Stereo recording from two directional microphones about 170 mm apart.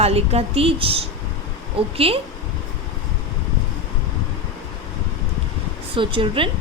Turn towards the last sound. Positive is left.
turn(degrees=-30)  # may be behind; listen again after turning